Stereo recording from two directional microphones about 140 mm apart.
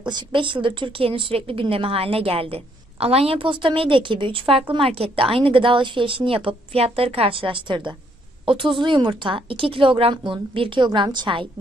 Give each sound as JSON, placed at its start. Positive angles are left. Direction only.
{"t": 0.1, "sound": "speech", "side_deg": -35}